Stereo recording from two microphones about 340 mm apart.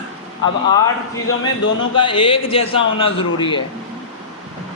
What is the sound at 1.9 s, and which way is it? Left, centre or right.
Speech, centre.